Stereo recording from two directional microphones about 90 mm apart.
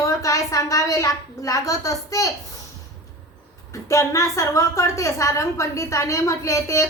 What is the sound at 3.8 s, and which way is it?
A woman's voice, 35° left (ahead or behind).